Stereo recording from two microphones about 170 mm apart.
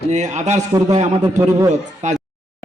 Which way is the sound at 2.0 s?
45° right (ahead or behind).